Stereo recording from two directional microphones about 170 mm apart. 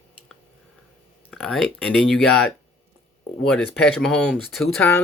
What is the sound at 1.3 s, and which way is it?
Speech, centre (ahead or behind).